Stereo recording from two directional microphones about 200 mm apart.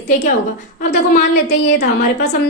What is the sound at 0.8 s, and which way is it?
Speech, 45° left (ahead or behind).